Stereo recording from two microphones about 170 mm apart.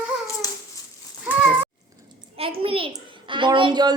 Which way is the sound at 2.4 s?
35° right (ahead or behind).